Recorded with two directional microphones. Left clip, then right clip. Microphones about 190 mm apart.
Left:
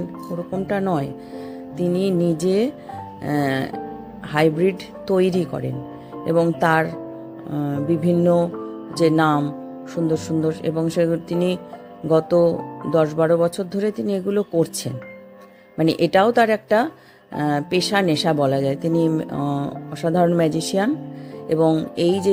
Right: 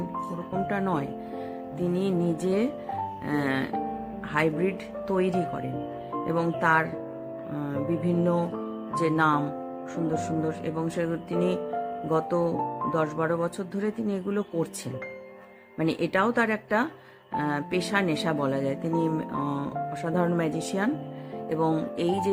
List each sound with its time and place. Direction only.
0.5 s music: 15° left (ahead or behind)
1.8 s speech: 20° left (ahead or behind)
7.5 s music: 15° left (ahead or behind)
9.0 s speech: 20° left (ahead or behind)
15.8 s speech: 20° left (ahead or behind)